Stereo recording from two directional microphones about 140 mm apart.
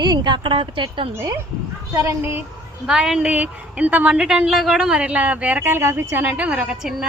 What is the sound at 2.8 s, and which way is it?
A woman's voice, 5° right (ahead or behind).